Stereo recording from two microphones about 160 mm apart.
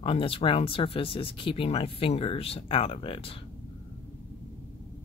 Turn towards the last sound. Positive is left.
turn(degrees=35)  # may be behind; listen again after turning